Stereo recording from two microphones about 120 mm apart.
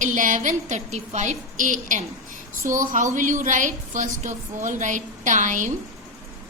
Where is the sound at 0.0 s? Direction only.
90° right.